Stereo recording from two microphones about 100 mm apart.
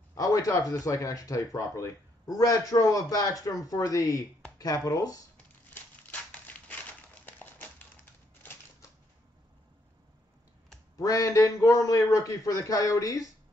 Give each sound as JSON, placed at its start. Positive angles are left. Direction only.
{"t": 0.1, "sound": "speech", "side_deg": 35}
{"t": 6.0, "sound": "a sound", "side_deg": 15}
{"t": 11.0, "sound": "speech", "side_deg": 35}